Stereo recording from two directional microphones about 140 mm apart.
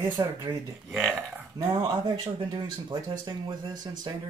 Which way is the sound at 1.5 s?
30° right (ahead or behind).